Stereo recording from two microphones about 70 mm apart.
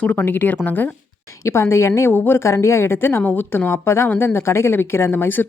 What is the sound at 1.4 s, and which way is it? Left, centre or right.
A woman's voice, left.